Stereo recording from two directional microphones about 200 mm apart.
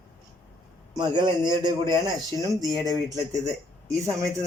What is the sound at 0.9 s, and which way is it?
Speech, 20° right (ahead or behind).